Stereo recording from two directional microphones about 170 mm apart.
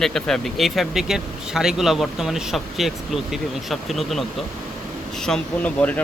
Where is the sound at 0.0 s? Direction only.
Centre (ahead or behind).